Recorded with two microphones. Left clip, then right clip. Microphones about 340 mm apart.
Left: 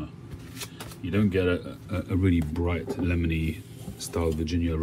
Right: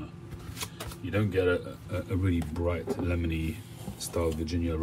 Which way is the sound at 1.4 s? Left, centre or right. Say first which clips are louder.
Even; left.